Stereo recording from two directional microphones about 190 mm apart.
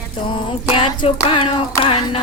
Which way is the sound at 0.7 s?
30° left (ahead or behind).